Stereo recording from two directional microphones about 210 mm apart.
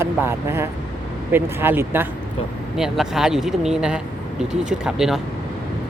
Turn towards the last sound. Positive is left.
turn(degrees=-5)  # may be behind; listen again after turning